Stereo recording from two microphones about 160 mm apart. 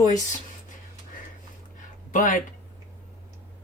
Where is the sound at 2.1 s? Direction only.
55° left (ahead or behind).